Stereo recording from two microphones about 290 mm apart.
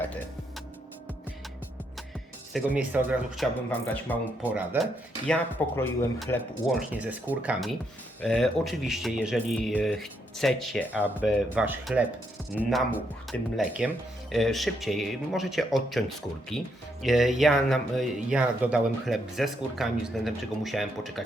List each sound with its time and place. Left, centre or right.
2.5 s speech: centre